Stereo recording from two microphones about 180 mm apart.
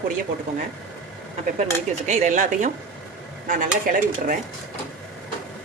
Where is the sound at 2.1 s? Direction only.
40° right (ahead or behind).